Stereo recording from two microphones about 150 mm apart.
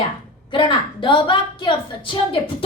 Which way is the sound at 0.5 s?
35° left (ahead or behind).